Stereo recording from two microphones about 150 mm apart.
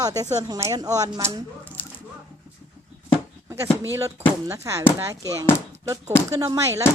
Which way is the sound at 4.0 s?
20° right (ahead or behind).